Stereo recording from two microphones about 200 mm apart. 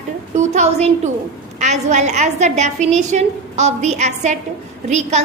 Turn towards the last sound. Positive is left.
turn(degrees=-35)  # may be behind; listen again after turning